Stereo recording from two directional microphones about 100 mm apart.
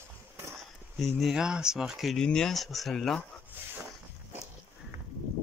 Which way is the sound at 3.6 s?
20° right (ahead or behind).